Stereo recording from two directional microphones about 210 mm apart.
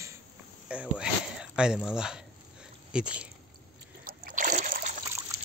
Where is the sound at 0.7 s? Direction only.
5° right (ahead or behind).